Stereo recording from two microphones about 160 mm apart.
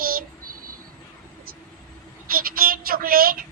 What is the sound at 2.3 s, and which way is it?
A woman's voice, 65° right (ahead or behind).